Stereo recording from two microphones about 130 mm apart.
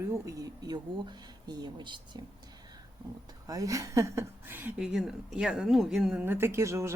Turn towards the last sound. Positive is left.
turn(degrees=-20)  # may be behind; listen again after turning